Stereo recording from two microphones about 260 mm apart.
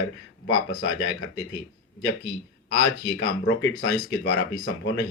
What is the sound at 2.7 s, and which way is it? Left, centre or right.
Speech, left.